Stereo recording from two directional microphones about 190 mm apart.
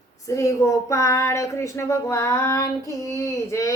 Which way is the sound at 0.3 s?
15° left (ahead or behind).